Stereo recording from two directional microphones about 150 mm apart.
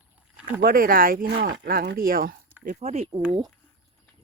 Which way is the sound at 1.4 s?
80° right.